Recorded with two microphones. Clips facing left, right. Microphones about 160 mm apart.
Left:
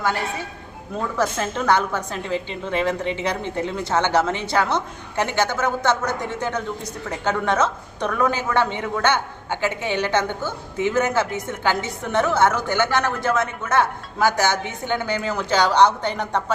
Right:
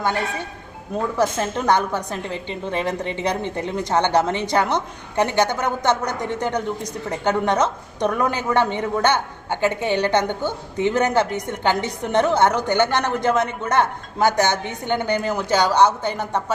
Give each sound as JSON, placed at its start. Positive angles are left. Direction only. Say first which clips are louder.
{"t": 0.9, "sound": "a woman's voice", "louder": "right 2 dB", "side_deg": -15}